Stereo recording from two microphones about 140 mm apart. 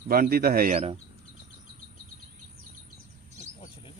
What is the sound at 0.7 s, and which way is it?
Speech, 45° right (ahead or behind).